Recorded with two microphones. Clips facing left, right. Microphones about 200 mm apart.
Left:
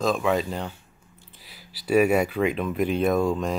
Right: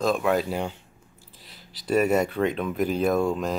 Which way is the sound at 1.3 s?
5° left (ahead or behind).